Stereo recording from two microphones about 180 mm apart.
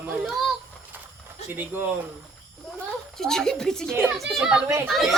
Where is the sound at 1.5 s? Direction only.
10° right (ahead or behind).